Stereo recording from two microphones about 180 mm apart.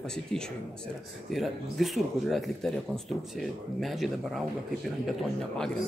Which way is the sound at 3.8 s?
Centre (ahead or behind).